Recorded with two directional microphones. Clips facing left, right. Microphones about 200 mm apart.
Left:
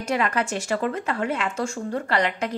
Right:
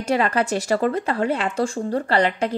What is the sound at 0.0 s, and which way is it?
Speech, 30° right (ahead or behind).